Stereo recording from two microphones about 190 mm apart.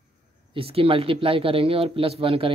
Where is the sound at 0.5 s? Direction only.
30° right (ahead or behind).